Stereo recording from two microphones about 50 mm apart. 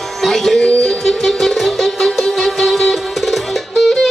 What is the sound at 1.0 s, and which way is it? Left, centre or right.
Music, centre.